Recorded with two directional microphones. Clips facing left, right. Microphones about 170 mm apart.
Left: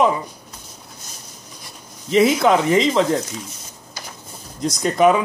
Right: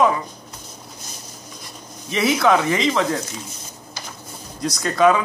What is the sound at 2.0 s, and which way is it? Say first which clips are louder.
Speech: left 3 dB; 20° left (ahead or behind).